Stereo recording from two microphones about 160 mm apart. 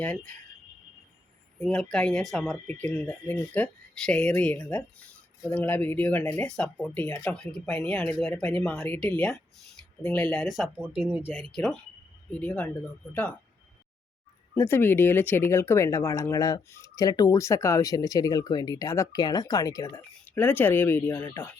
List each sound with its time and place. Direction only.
1.6 s speech: 5° left (ahead or behind)
11.0 s speech: 15° right (ahead or behind)
11.5 s speech: 5° left (ahead or behind)
14.5 s speech: 15° left (ahead or behind)